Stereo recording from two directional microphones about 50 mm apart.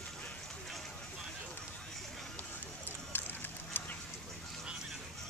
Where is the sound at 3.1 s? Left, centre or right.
Left.